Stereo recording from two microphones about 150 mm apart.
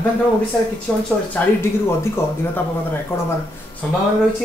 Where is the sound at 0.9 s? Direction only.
5° left (ahead or behind).